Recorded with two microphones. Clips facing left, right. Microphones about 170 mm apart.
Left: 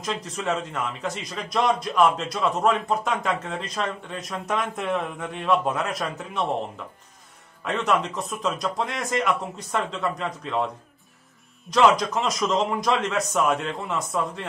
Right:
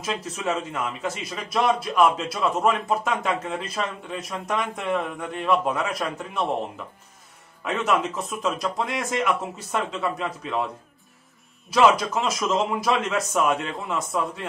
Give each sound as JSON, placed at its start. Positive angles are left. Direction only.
{"t": 0.0, "sound": "a man's voice", "side_deg": -5}
{"t": 7.6, "sound": "a man's voice", "side_deg": -5}
{"t": 11.7, "sound": "a man's voice", "side_deg": -5}